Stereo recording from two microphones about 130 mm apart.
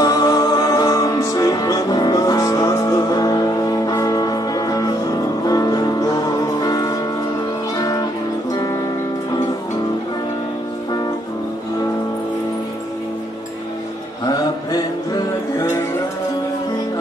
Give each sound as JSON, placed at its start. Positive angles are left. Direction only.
{"t": 0.0, "sound": "music", "side_deg": 25}
{"t": 14.2, "sound": "music", "side_deg": 30}